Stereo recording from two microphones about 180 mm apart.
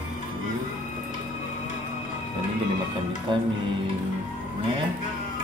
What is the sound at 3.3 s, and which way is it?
Speech, 25° right (ahead or behind).